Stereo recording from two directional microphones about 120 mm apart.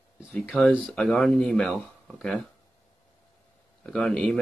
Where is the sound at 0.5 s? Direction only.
15° left (ahead or behind).